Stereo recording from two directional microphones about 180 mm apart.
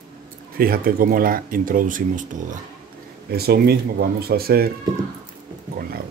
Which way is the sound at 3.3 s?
60° right (ahead or behind).